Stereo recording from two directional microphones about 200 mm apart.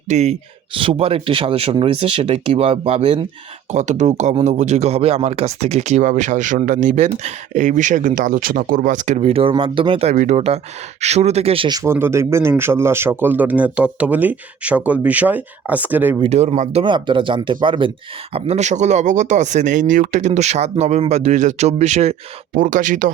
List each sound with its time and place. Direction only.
0.1 s speech: 35° right (ahead or behind); by 16.1 s 10° right (ahead or behind)
16.2 s speech: 30° right (ahead or behind)